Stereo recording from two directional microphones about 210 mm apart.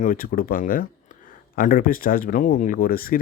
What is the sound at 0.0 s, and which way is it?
Speech, 40° left (ahead or behind).